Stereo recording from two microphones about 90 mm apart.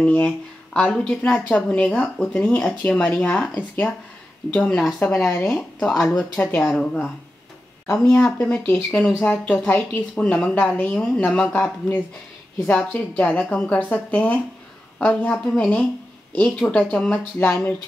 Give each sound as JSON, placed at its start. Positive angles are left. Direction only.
{"t": 0.0, "sound": "speech", "side_deg": 15}
{"t": 4.6, "sound": "speech", "side_deg": 5}
{"t": 5.1, "sound": "speech", "side_deg": 25}
{"t": 5.6, "sound": "speech", "side_deg": 10}
{"t": 7.8, "sound": "speech", "side_deg": 30}
{"t": 8.9, "sound": "speech", "side_deg": 10}